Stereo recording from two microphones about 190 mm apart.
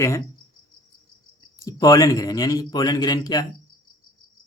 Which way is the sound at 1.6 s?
20° left (ahead or behind).